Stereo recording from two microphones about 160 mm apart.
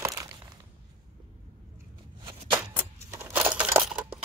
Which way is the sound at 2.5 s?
15° right (ahead or behind).